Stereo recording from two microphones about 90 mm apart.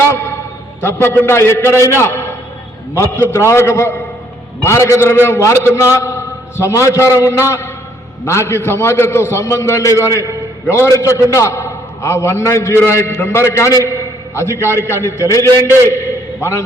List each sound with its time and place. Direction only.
0.1 s a man's voice: 25° left (ahead or behind)